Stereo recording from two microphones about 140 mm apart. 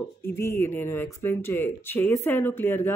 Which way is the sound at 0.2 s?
15° left (ahead or behind).